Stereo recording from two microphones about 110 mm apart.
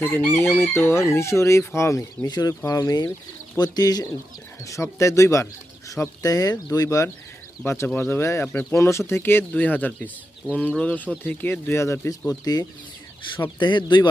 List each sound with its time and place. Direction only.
0.0 s chicken: 20° left (ahead or behind); by 2.6 s 35° left (ahead or behind)
2.6 s speech: 35° left (ahead or behind)
4.6 s chicken: 30° left (ahead or behind)
5.9 s speech: 30° left (ahead or behind)
7.6 s chicken: 25° left (ahead or behind)
9.5 s speech: 15° left (ahead or behind)
11.2 s chicken: 20° left (ahead or behind)
12.5 s speech: 35° left (ahead or behind)